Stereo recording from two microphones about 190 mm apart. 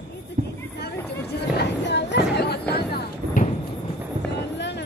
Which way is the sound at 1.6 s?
65° left (ahead or behind).